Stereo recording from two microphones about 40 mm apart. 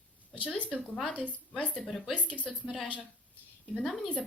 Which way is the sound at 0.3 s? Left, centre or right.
Left.